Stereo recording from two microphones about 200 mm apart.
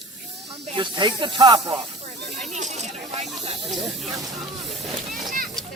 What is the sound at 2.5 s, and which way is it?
Snake, 35° right (ahead or behind).